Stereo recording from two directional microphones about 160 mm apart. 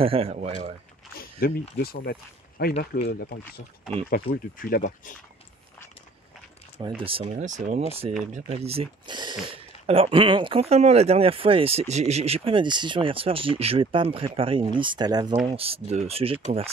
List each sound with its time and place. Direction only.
0.0 s speech: 35° right (ahead or behind)
1.1 s speech: 70° left (ahead or behind)
4.1 s speech: 70° left (ahead or behind)
7.0 s speech: 35° right (ahead or behind)
7.4 s speech: 50° right (ahead or behind); by 15.3 s 25° right (ahead or behind)
15.4 s speech: 35° right (ahead or behind)